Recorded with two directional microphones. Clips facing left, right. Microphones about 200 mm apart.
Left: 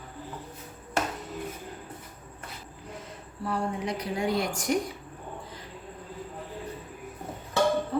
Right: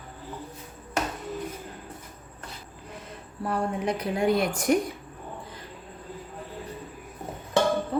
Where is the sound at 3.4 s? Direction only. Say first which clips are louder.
Right 3 dB; 55° right (ahead or behind).